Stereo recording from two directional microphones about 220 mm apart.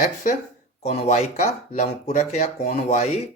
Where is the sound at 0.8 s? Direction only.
30° left (ahead or behind).